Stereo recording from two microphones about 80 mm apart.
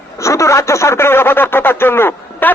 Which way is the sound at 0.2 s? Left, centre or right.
Left.